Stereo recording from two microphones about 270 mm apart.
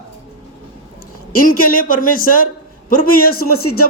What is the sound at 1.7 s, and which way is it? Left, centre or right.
Speech, left.